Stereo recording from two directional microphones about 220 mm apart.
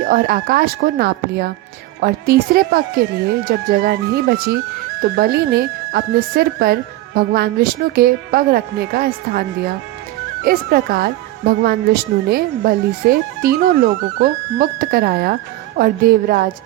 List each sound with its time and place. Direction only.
0.0 s speech: 40° right (ahead or behind)